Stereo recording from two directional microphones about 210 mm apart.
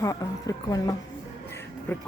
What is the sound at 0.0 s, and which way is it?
Speech, 15° left (ahead or behind).